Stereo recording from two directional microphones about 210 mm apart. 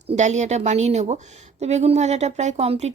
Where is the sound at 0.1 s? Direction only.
35° right (ahead or behind).